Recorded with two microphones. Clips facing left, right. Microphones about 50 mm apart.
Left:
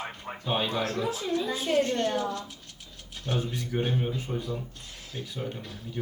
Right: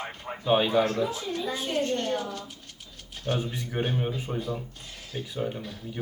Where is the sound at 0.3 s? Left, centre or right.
Centre.